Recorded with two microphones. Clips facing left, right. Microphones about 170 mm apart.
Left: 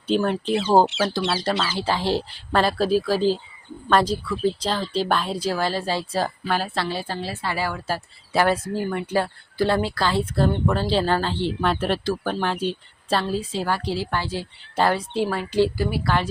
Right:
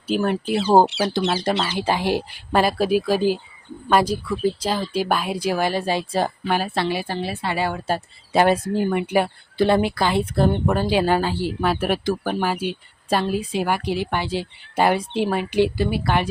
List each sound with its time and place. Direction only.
0.1 s speech: 5° right (ahead or behind)
1.0 s a woman's voice: 20° right (ahead or behind)